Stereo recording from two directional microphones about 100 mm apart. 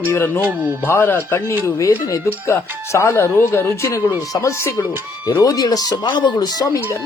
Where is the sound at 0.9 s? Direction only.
20° left (ahead or behind).